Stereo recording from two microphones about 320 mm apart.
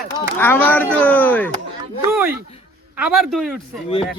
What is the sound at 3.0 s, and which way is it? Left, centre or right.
Speech, centre.